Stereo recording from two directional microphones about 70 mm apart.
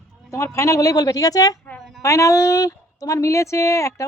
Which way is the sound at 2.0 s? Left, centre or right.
Left.